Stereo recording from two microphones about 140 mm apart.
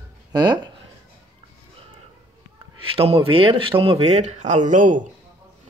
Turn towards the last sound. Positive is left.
turn(degrees=-65)  # may be behind; listen again after turning